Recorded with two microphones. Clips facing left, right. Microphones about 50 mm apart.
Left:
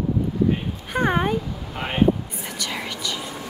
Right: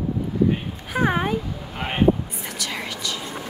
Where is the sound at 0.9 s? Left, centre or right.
Centre.